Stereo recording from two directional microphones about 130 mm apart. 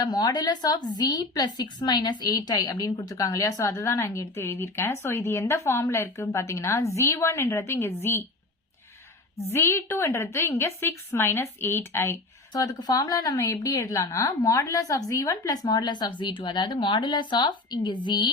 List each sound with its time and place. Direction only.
0.0 s a woman's voice: 30° left (ahead or behind)
9.5 s a woman's voice: 20° left (ahead or behind)
12.5 s a woman's voice: 30° left (ahead or behind)